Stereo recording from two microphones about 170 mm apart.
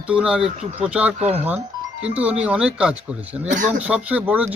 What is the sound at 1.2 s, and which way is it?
Speech, 40° right (ahead or behind).